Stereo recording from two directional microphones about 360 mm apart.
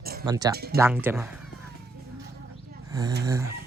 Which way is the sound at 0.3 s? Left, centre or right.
Centre.